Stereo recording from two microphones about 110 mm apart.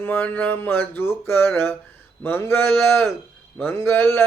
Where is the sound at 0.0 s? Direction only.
15° left (ahead or behind).